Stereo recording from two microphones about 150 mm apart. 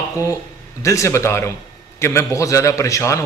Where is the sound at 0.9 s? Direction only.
20° left (ahead or behind).